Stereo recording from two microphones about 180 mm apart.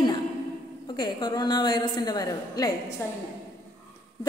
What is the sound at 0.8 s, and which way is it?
A woman's voice, 25° left (ahead or behind).